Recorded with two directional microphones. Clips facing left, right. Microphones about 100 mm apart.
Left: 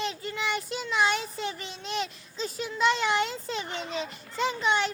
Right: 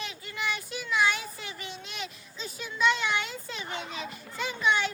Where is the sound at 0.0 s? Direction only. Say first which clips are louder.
Left 4 dB; 35° left (ahead or behind).